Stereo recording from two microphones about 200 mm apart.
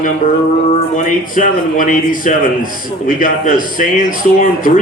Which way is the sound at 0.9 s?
40° left (ahead or behind).